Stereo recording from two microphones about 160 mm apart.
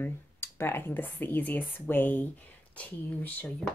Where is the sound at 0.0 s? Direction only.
15° left (ahead or behind).